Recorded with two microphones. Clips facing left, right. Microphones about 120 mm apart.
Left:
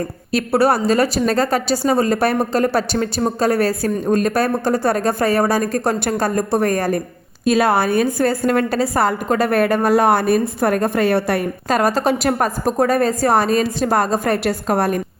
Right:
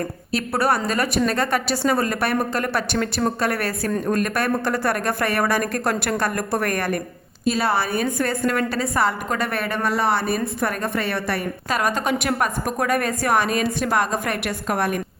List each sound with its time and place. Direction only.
0.3 s a woman's voice: 35° left (ahead or behind)
7.4 s a woman's voice: 50° left (ahead or behind)
8.0 s a woman's voice: 35° left (ahead or behind); by 10.4 s 55° left (ahead or behind)
10.6 s a woman's voice: 40° left (ahead or behind)